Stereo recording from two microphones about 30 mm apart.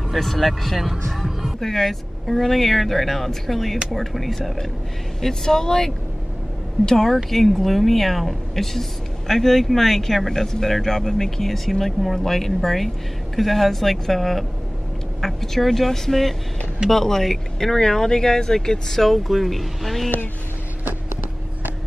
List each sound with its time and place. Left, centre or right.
0.1 s speech: centre
5.2 s speech: centre
18.9 s speech: centre